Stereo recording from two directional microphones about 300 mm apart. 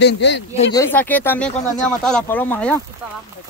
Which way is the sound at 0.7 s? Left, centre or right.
Centre.